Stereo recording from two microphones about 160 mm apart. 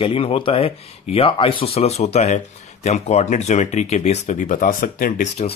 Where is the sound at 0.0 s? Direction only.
35° left (ahead or behind).